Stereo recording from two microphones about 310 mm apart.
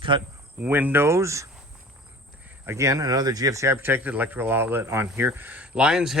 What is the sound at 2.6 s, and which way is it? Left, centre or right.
Speech, centre.